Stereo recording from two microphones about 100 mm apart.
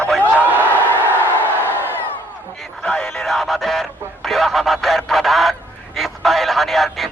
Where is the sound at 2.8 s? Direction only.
15° left (ahead or behind).